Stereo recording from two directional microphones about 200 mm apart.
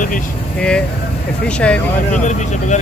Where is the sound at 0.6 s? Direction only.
5° left (ahead or behind).